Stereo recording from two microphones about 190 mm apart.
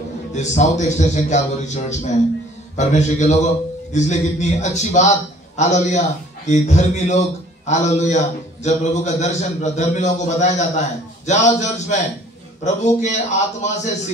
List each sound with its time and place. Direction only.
0.3 s a man's voice: 40° left (ahead or behind)